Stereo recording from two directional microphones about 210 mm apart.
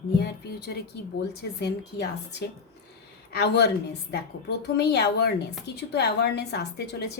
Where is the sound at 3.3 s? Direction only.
50° left (ahead or behind).